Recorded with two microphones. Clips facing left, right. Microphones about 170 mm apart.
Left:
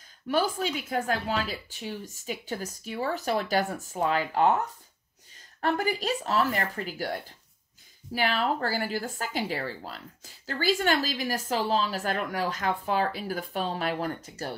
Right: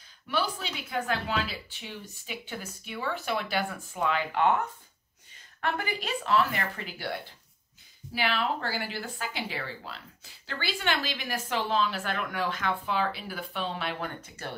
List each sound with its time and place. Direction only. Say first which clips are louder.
0.3 s speech: left 5 dB; 45° left (ahead or behind)
5.6 s speech: left 5 dB; 40° left (ahead or behind)